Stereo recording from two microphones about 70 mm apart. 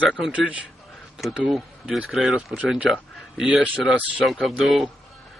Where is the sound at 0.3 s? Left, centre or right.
Centre.